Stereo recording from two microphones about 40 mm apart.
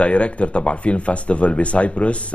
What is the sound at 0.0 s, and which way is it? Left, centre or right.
Speech, left.